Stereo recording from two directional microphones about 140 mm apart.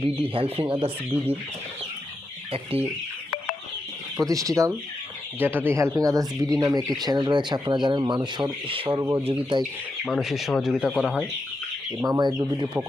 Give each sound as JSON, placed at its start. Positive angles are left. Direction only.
{"t": 0.0, "sound": "speech", "side_deg": -45}
{"t": 4.3, "sound": "speech", "side_deg": -25}
{"t": 9.0, "sound": "speech", "side_deg": -25}
{"t": 9.2, "sound": "speech", "side_deg": -40}
{"t": 10.1, "sound": "speech", "side_deg": 0}
{"t": 12.0, "sound": "speech", "side_deg": -25}